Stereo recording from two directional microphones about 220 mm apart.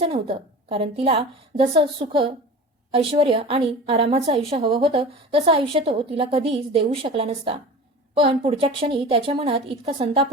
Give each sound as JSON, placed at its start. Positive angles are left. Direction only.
{"t": 0.0, "sound": "a woman's voice", "side_deg": -25}